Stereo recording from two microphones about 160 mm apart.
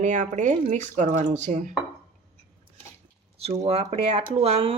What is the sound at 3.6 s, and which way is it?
Speech, 40° right (ahead or behind).